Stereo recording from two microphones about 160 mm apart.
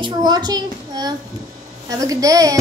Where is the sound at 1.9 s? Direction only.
20° right (ahead or behind).